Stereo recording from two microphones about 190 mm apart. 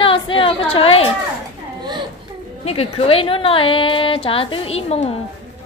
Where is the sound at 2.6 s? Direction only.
30° left (ahead or behind).